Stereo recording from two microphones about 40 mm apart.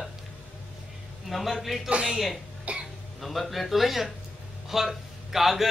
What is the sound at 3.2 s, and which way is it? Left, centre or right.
Speech, centre.